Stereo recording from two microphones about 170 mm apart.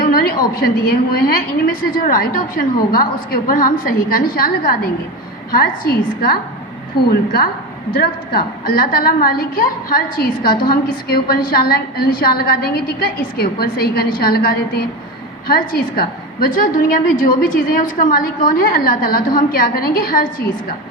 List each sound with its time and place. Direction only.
0.0 s a woman's voice: 60° left (ahead or behind)